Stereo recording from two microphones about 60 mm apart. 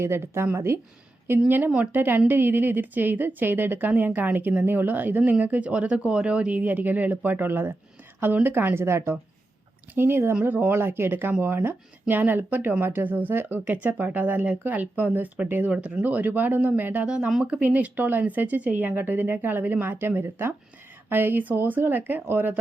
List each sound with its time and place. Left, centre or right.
0.0 s speech: right
1.5 s a woman's voice: right
17.1 s a woman's voice: centre; by 22.5 s right